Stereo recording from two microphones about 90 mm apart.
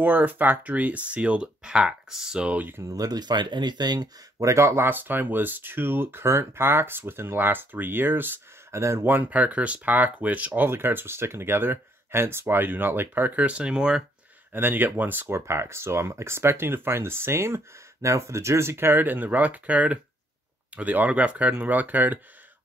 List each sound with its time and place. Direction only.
0.0 s speech: 20° right (ahead or behind)
2.8 s speech: 40° right (ahead or behind)
4.5 s speech: 30° right (ahead or behind); by 14.0 s 10° right (ahead or behind)
14.5 s speech: 20° right (ahead or behind)